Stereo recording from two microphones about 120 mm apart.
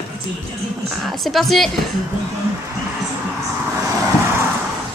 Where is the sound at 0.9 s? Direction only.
Centre (ahead or behind).